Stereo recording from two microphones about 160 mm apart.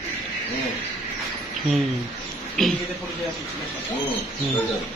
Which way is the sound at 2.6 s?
5° left (ahead or behind).